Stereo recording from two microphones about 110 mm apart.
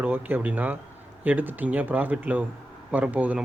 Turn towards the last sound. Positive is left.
turn(degrees=-15)  # may be behind; listen again after turning